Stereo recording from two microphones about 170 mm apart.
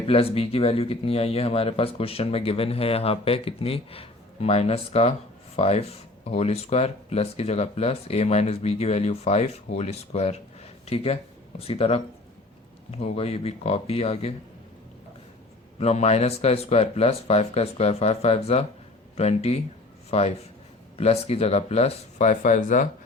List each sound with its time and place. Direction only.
0.1 s speech: 35° left (ahead or behind)
15.8 s speech: 40° left (ahead or behind)